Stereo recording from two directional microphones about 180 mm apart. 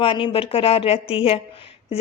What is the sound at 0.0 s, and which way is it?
A woman's voice, 30° left (ahead or behind).